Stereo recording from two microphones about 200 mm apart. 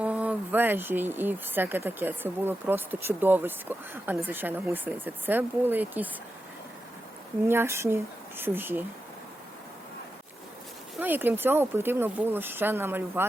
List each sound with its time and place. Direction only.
0.0 s speech: 5° right (ahead or behind)
7.4 s speech: 10° right (ahead or behind)
11.0 s speech: 10° right (ahead or behind)